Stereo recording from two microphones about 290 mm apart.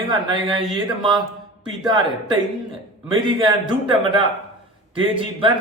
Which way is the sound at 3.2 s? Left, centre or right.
Centre.